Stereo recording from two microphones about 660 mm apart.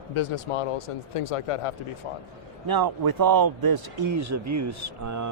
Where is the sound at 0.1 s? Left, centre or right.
Left.